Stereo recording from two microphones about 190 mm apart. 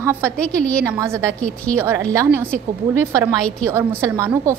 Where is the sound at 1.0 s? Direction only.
15° right (ahead or behind).